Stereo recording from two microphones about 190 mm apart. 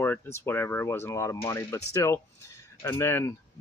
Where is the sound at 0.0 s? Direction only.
10° left (ahead or behind).